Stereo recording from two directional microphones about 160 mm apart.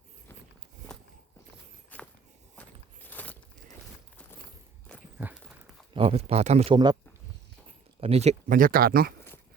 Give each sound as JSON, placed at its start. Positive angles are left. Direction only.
{"t": 1.9, "sound": "walk", "side_deg": 10}
{"t": 3.1, "sound": "a sound", "side_deg": 10}
{"t": 4.9, "sound": "walk", "side_deg": 5}
{"t": 5.2, "sound": "a sound", "side_deg": -5}
{"t": 5.9, "sound": "speech", "side_deg": -35}
{"t": 8.0, "sound": "speech", "side_deg": -40}
{"t": 8.4, "sound": "speech", "side_deg": -60}